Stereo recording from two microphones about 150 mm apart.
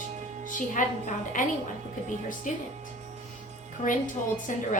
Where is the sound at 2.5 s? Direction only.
60° left (ahead or behind).